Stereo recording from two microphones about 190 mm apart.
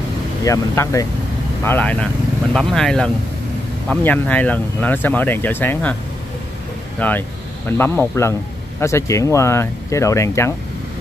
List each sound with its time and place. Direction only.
0.5 s a man's voice: 15° left (ahead or behind)
7.0 s a man's voice: 10° left (ahead or behind)